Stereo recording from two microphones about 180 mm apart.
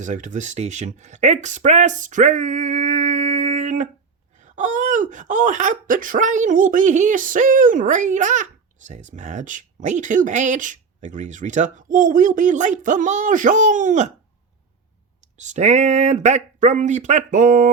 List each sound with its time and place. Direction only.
0.0 s speech: 45° right (ahead or behind)
15.4 s speech: 40° right (ahead or behind)